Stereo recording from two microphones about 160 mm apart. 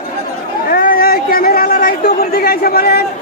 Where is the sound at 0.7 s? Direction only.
60° left (ahead or behind).